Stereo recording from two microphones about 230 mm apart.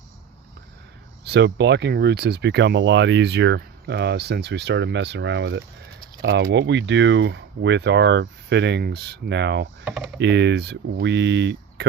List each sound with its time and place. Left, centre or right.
1.2 s speech: right
9.8 s speech: centre
10.2 s speech: right